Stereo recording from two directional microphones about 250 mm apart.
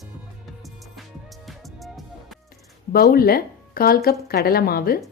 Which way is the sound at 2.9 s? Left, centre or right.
Left.